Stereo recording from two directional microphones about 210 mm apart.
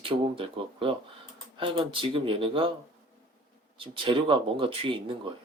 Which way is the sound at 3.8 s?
25° right (ahead or behind).